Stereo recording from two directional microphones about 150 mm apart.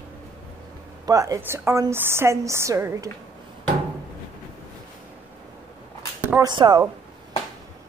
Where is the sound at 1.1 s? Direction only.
20° right (ahead or behind).